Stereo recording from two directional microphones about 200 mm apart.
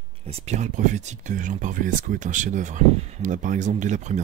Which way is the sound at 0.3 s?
35° right (ahead or behind).